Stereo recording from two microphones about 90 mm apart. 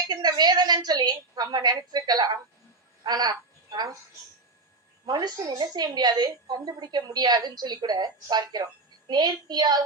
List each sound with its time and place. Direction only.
0.1 s a woman's voice: 50° right (ahead or behind)
5.0 s a woman's voice: 50° right (ahead or behind)